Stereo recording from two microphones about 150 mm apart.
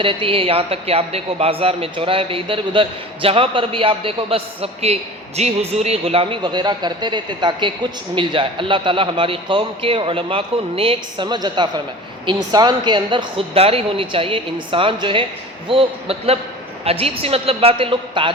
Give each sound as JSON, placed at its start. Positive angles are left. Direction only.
{"t": 0.0, "sound": "a man's voice", "side_deg": -35}